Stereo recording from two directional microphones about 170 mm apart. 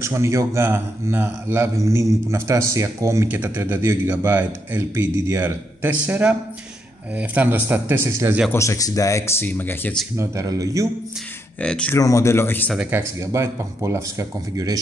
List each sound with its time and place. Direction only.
0.0 s a man's voice: 15° right (ahead or behind)
8.5 s speech: 15° left (ahead or behind)
10.1 s speech: 15° right (ahead or behind)
11.6 s speech: 5° left (ahead or behind)
12.0 s speech: 20° left (ahead or behind)
12.7 s a man's voice: 15° right (ahead or behind)